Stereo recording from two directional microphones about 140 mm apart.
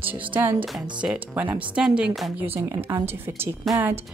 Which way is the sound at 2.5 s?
20° right (ahead or behind).